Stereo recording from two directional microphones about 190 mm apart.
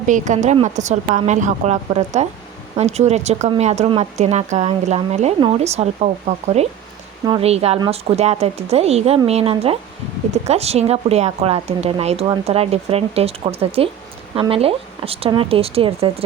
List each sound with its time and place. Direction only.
0.1 s a woman's voice: 40° right (ahead or behind)